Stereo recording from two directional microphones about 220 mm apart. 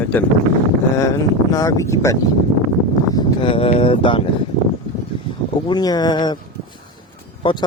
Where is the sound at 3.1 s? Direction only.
25° left (ahead or behind).